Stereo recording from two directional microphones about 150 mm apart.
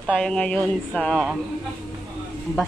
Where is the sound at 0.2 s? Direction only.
5° left (ahead or behind).